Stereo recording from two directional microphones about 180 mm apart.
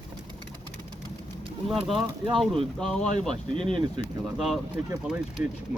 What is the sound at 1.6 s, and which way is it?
Speech, centre (ahead or behind).